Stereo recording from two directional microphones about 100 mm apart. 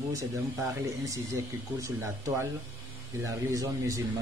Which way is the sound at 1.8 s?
30° right (ahead or behind).